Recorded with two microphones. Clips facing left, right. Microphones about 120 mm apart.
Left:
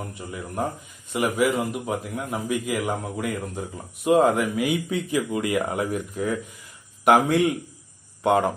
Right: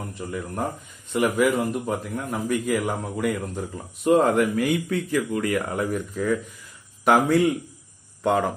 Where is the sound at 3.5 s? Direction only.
15° left (ahead or behind).